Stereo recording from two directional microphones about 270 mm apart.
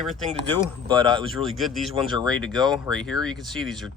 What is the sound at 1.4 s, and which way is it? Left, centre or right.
Speech, centre.